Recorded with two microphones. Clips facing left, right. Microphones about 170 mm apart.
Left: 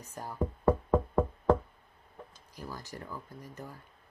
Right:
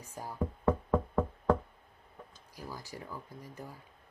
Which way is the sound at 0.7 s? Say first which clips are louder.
Left 3 dB; 35° left (ahead or behind).